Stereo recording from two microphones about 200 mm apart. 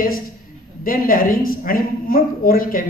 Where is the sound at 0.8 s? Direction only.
45° left (ahead or behind).